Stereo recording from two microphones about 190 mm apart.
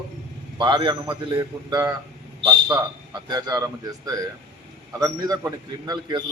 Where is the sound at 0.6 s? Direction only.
25° right (ahead or behind).